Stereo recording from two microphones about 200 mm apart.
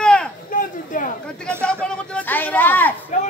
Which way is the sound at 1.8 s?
5° left (ahead or behind).